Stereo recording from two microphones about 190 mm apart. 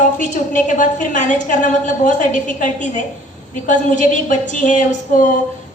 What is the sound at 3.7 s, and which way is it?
A woman's voice, 40° left (ahead or behind).